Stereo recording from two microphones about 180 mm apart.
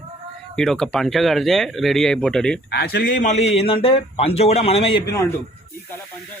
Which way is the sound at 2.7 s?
65° left (ahead or behind).